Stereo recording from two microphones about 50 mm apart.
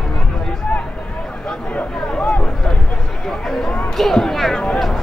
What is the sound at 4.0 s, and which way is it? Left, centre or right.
Speech, centre.